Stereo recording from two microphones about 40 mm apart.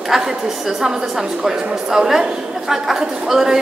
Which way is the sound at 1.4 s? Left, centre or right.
Centre.